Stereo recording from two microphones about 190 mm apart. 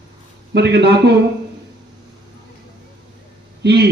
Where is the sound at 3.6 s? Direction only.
60° right (ahead or behind).